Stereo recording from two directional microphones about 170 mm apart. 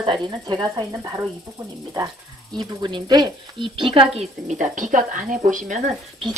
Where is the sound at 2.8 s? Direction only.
25° right (ahead or behind).